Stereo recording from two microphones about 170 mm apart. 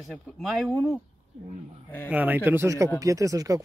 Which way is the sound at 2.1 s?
10° right (ahead or behind).